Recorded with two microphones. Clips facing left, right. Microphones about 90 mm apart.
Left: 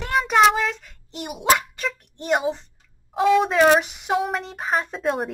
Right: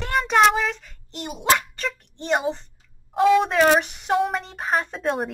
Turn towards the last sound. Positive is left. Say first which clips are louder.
# left 1 dB
turn(degrees=0)  # may be behind; listen again after turning